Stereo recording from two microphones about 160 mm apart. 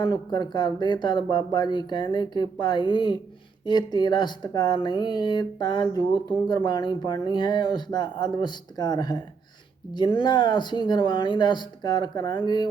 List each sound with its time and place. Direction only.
0.0 s speech: 30° left (ahead or behind)